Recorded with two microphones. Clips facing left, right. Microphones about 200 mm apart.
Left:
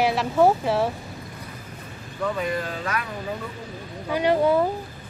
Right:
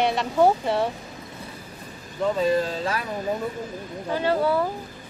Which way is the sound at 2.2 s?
30° right (ahead or behind).